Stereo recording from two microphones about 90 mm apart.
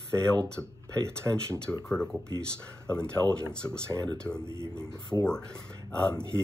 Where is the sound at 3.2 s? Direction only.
20° left (ahead or behind).